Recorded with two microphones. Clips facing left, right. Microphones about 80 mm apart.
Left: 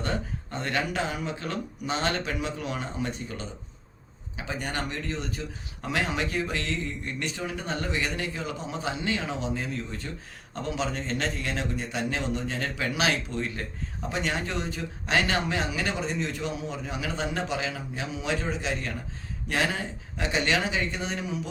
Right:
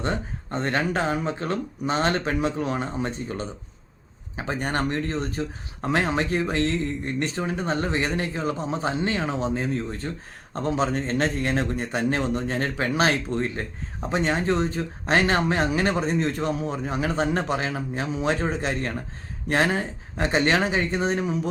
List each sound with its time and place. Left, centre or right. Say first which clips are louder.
0.5 s speech: right 5 dB; right